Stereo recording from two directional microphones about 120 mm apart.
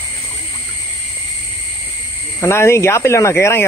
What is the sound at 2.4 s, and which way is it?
Speech, 20° left (ahead or behind).